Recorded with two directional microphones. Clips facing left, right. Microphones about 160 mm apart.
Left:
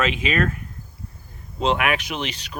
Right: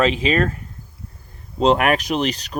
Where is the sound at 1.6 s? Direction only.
40° right (ahead or behind).